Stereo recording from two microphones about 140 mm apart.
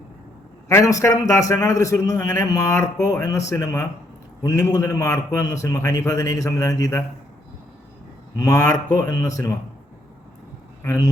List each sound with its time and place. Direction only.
0.7 s a man's voice: 20° left (ahead or behind)
8.4 s a man's voice: 25° left (ahead or behind)
10.8 s a man's voice: 25° left (ahead or behind)